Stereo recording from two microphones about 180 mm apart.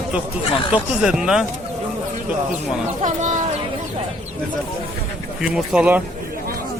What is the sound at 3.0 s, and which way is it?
Speech, 40° right (ahead or behind).